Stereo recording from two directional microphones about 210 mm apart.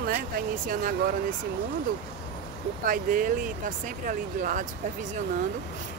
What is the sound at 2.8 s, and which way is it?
Speech, 40° right (ahead or behind).